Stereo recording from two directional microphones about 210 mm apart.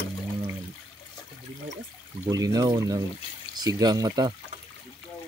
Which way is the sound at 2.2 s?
15° right (ahead or behind).